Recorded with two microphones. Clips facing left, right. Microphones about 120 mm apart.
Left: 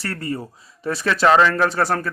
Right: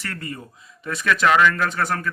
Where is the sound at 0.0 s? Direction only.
35° left (ahead or behind).